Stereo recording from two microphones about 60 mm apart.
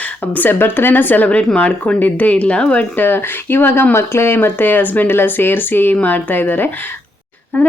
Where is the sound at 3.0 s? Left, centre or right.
Left.